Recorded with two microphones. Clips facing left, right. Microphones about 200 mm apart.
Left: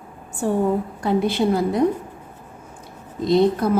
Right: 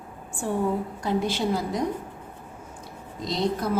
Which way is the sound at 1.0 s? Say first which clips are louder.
Left 6 dB; 55° left (ahead or behind).